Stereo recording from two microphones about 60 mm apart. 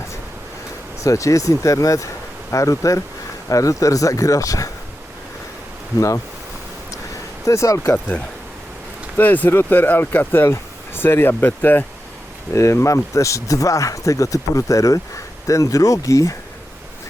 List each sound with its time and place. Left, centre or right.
1.0 s a man's voice: left
7.4 s a man's voice: left
7.9 s speech: left
12.5 s a man's voice: left